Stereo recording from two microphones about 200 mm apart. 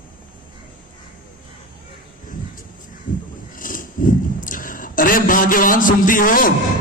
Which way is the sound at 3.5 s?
45° left (ahead or behind).